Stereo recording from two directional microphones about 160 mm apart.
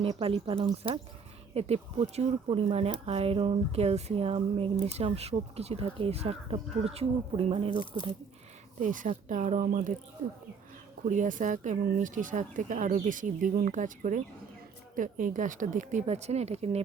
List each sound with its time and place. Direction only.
0.0 s speech: 35° right (ahead or behind)
8.8 s speech: 55° right (ahead or behind)
11.0 s speech: 50° right (ahead or behind)